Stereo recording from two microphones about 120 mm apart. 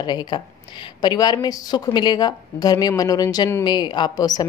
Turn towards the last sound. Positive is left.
turn(degrees=35)  # may be behind; listen again after turning